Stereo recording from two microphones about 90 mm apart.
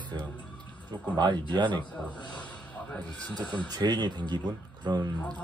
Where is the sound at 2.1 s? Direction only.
60° left (ahead or behind).